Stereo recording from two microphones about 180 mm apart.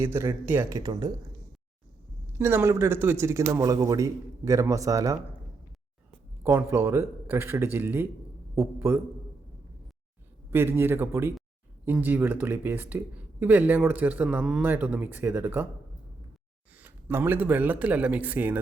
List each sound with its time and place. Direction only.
0.0 s a man's voice: 15° right (ahead or behind)
2.4 s a man's voice: 15° right (ahead or behind)
6.4 s a man's voice: 15° right (ahead or behind)
10.5 s a man's voice: 10° right (ahead or behind)
16.7 s speech: 10° right (ahead or behind)